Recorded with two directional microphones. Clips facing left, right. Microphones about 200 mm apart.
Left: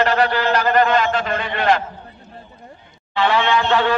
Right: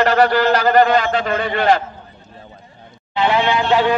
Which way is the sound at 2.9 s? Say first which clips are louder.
Right 1 dB; 20° right (ahead or behind).